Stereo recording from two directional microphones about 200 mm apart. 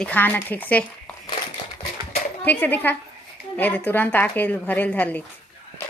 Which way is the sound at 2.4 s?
10° left (ahead or behind).